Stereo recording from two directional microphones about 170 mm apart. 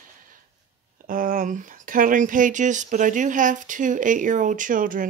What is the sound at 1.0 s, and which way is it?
Speech, 55° right (ahead or behind).